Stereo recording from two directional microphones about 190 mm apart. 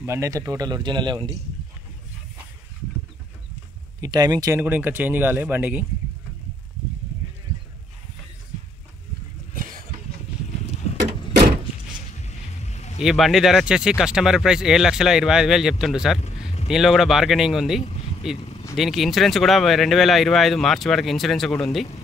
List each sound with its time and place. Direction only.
0.0 s speech: 15° right (ahead or behind)
4.0 s speech: 20° right (ahead or behind)
12.2 s vehicle: 35° left (ahead or behind)
13.0 s speech: centre (ahead or behind)
16.2 s a sound: 35° left (ahead or behind)
16.6 s speech: centre (ahead or behind)
18.4 s vehicle: 30° left (ahead or behind)
18.8 s speech: centre (ahead or behind)